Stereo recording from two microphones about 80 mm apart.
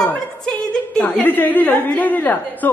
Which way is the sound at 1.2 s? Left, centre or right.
Left.